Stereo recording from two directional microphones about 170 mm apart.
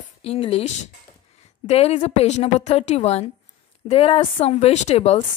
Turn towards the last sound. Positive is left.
turn(degrees=40)  # may be behind; listen again after turning